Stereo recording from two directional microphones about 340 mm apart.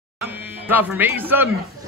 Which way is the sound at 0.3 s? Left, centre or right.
Centre.